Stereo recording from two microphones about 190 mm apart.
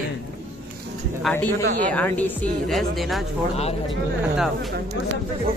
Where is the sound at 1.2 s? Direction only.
5° left (ahead or behind).